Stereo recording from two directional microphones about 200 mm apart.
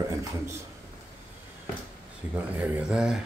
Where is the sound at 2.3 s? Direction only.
5° right (ahead or behind).